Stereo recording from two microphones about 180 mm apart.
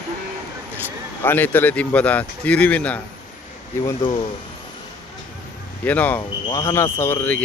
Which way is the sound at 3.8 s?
25° left (ahead or behind).